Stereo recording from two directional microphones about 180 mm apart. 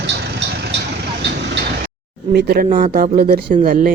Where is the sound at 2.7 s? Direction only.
45° right (ahead or behind).